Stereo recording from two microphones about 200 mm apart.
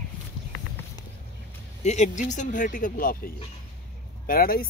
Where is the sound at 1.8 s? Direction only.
35° left (ahead or behind).